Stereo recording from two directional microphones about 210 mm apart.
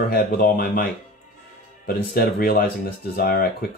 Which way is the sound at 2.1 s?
45° left (ahead or behind).